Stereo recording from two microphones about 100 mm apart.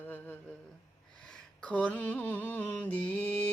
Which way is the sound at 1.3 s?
10° left (ahead or behind).